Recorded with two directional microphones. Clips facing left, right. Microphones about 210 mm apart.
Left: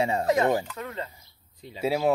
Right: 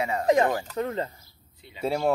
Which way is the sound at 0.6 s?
35° right (ahead or behind).